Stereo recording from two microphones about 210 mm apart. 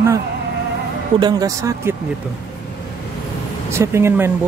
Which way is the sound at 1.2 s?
15° right (ahead or behind).